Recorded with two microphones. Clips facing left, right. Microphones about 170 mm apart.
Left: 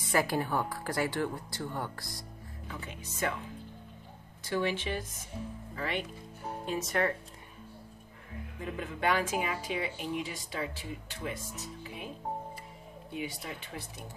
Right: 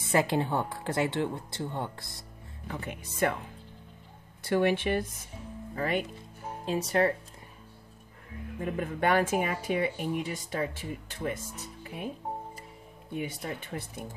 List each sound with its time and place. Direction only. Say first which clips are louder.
0.1 s speech: right 3 dB; 25° right (ahead or behind)
2.7 s speech: right 6 dB; 55° right (ahead or behind)
4.4 s speech: right 6 dB; 55° right (ahead or behind)
5.8 s speech: right 5 dB; 45° right (ahead or behind)
6.6 s speech: right 5 dB; 35° right (ahead or behind)
8.5 s speech: right 6 dB; 50° right (ahead or behind)
13.1 s speech: right 4 dB; 50° right (ahead or behind)